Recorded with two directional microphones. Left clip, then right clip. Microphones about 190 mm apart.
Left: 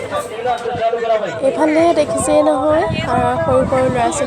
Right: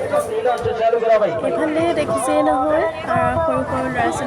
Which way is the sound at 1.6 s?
20° left (ahead or behind).